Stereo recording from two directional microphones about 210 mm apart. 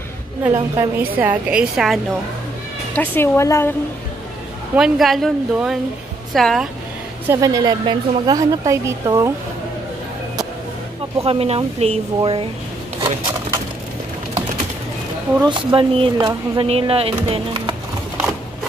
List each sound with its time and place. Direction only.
0.4 s speech: 15° right (ahead or behind)
2.9 s speech: 10° left (ahead or behind)
4.7 s speech: centre (ahead or behind)
7.2 s speech: 15° right (ahead or behind)
11.2 s speech: 30° right (ahead or behind)
15.4 s speech: 25° right (ahead or behind)